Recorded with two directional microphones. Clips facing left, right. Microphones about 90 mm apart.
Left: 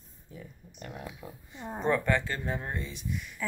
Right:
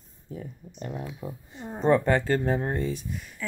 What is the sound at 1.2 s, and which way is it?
Speech, 20° right (ahead or behind).